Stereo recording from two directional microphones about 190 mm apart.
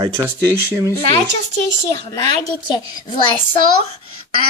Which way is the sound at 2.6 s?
25° left (ahead or behind).